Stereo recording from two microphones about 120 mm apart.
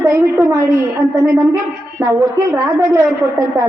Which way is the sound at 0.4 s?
30° right (ahead or behind).